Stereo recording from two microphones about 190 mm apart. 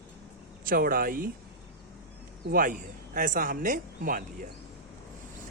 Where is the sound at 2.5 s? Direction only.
45° right (ahead or behind).